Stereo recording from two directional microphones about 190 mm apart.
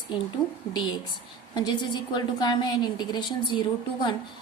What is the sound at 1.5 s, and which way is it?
A woman's voice, 20° left (ahead or behind).